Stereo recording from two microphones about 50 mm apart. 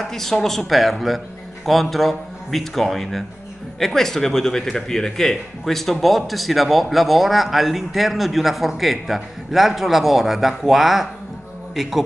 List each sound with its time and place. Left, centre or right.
0.0 s a man's voice: centre